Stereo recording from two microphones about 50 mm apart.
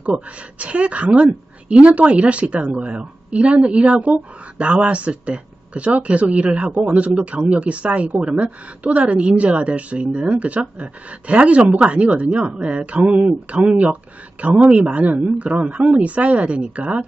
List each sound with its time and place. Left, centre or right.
0.0 s a woman's voice: right